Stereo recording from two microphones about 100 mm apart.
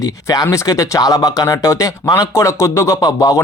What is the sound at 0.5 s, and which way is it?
Speech, 35° left (ahead or behind).